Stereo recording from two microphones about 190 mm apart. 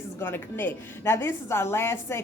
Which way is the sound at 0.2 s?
10° left (ahead or behind).